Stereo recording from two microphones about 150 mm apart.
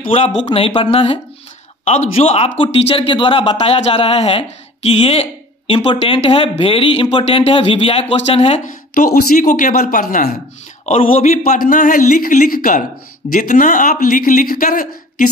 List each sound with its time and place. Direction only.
0.1 s speech: 40° left (ahead or behind)
8.6 s speech: 65° left (ahead or behind)
10.9 s speech: 45° left (ahead or behind); by 12.8 s 75° left (ahead or behind)
13.3 s speech: 60° left (ahead or behind)